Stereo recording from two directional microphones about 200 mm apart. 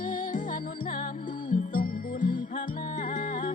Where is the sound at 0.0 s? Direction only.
40° left (ahead or behind).